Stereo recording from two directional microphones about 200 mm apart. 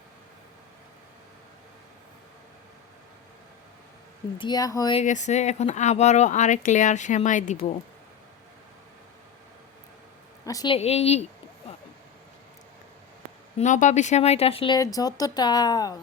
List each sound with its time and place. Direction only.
4.4 s speech: 20° left (ahead or behind)
4.9 s speech: 35° left (ahead or behind)
10.4 s speech: 20° left (ahead or behind)
10.8 s speech: 30° left (ahead or behind)
13.6 s speech: 40° left (ahead or behind)
14.8 s speech: 20° left (ahead or behind)